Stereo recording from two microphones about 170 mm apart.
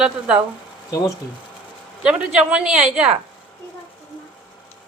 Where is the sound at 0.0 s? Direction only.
5° right (ahead or behind).